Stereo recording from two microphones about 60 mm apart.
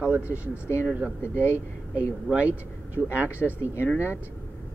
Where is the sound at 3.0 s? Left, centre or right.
Centre.